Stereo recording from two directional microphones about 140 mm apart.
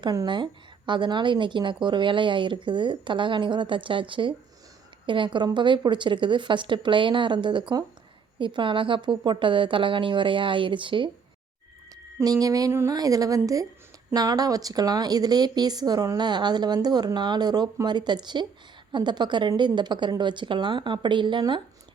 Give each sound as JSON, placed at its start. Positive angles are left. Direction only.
{"t": 0.0, "sound": "a woman's voice", "side_deg": -30}
{"t": 12.2, "sound": "a woman's voice", "side_deg": -25}